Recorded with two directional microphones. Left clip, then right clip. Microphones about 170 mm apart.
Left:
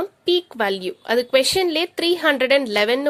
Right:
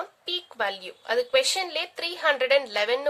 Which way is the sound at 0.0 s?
35° left (ahead or behind).